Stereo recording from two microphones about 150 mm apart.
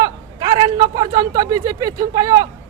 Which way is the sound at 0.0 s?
30° right (ahead or behind).